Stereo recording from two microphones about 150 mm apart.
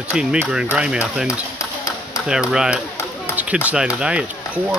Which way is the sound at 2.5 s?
5° right (ahead or behind).